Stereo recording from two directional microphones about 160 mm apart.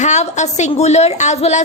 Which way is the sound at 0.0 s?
45° left (ahead or behind).